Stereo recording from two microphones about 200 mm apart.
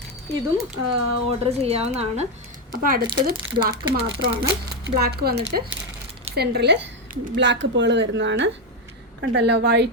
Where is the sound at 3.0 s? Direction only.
20° right (ahead or behind).